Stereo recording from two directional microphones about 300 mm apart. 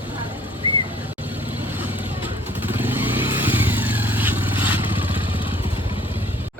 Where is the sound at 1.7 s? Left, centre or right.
Centre.